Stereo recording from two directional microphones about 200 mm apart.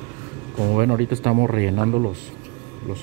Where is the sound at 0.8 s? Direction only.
55° right (ahead or behind).